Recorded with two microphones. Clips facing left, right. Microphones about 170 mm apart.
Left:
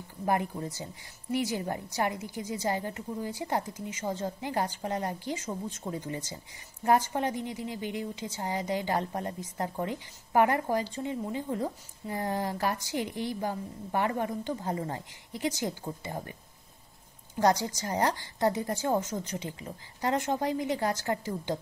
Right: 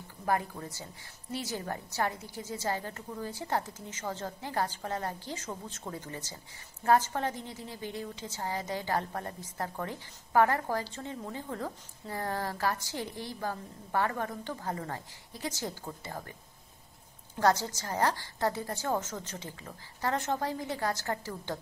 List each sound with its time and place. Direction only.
0.2 s a woman's voice: 20° left (ahead or behind)
17.4 s a woman's voice: 15° left (ahead or behind)